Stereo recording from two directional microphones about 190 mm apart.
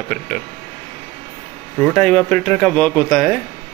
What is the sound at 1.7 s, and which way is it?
Speech, 5° right (ahead or behind).